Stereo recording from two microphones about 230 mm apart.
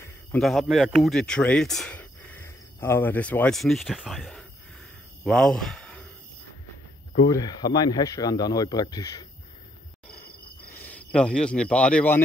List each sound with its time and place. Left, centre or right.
0.4 s speech: centre
7.2 s speech: centre
10.8 s speech: centre